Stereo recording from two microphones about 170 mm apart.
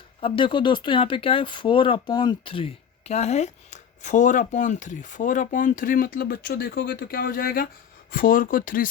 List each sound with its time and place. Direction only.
0.2 s speech: 30° left (ahead or behind); by 8.9 s 55° left (ahead or behind)